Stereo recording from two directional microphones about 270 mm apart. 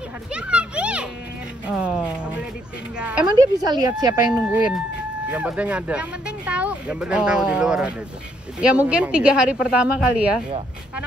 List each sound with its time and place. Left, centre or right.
0.3 s children playing: centre
1.8 s music: centre
3.0 s speech: centre
3.3 s speech: centre